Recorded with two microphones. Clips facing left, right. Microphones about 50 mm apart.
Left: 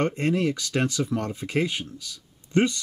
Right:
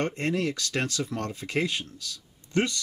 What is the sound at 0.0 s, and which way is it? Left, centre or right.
Speech, left.